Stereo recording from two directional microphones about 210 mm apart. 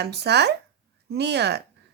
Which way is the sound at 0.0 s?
50° right (ahead or behind).